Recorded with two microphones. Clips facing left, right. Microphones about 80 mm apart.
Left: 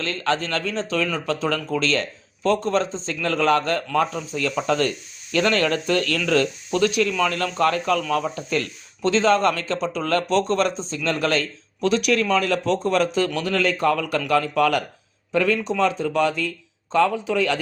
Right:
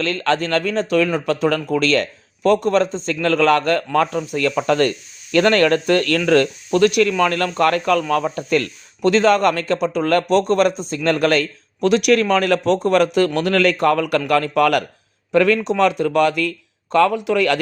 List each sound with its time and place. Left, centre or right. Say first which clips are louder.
0.0 s a man's voice: right 4 dB; right